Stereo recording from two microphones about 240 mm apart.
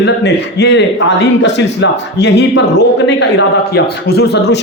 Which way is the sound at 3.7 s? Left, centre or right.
Left.